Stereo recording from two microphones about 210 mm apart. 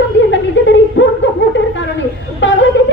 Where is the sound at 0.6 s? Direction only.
60° left (ahead or behind).